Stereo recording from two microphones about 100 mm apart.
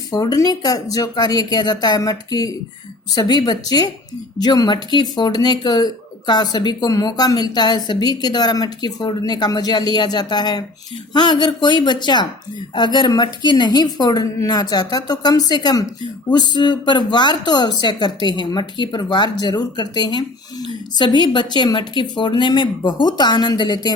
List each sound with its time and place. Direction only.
0.1 s speech: 40° left (ahead or behind)